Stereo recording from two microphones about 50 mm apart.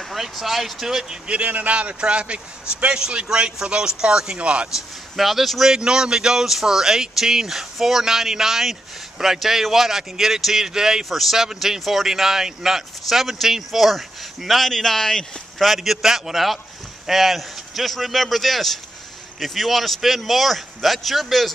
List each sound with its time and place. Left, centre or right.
0.1 s speech: centre
1.2 s speech: right
4.7 s speech: centre
5.7 s speech: centre
15.6 s speech: centre